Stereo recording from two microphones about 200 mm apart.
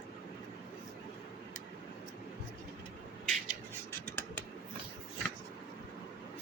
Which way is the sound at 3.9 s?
10° left (ahead or behind).